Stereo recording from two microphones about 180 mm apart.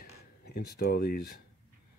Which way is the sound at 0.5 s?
60° left (ahead or behind).